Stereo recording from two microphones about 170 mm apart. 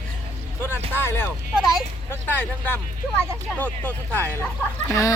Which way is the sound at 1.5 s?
Centre (ahead or behind).